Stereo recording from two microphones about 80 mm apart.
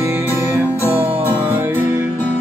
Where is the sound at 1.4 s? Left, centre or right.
Right.